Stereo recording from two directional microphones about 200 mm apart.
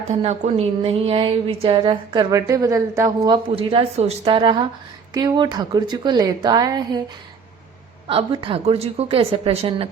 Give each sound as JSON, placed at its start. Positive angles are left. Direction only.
{"t": 0.2, "sound": "speech", "side_deg": -30}
{"t": 8.0, "sound": "speech", "side_deg": -25}